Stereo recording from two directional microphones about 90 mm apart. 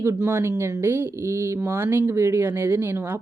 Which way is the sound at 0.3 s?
30° right (ahead or behind).